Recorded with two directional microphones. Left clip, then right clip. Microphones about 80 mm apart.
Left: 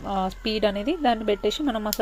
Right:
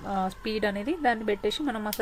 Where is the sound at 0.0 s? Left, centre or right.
Centre.